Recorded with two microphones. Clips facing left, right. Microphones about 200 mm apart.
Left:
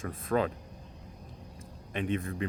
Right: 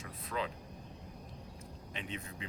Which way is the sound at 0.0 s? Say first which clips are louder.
Left 10 dB; 50° left (ahead or behind).